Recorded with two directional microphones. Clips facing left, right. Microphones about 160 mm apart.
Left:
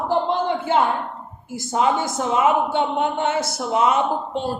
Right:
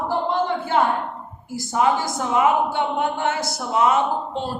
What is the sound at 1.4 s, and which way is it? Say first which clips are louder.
A woman's voice: even; 20° left (ahead or behind).